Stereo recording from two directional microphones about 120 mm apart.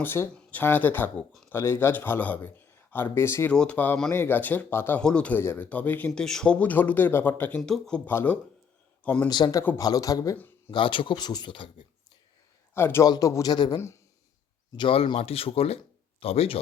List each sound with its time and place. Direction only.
0.0 s a man's voice: 20° left (ahead or behind)
3.5 s speech: 10° left (ahead or behind)
6.2 s speech: 5° left (ahead or behind)
9.2 s speech: 35° left (ahead or behind)
10.7 s speech: 45° left (ahead or behind)
12.7 s speech: 20° left (ahead or behind); by 13.7 s 35° left (ahead or behind)
14.8 s a man's voice: 50° left (ahead or behind)